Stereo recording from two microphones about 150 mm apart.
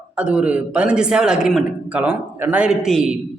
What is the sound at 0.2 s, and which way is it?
A man's voice, 10° right (ahead or behind).